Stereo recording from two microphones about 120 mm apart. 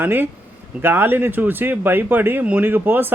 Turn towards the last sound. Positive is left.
turn(degrees=-15)  # may be behind; listen again after turning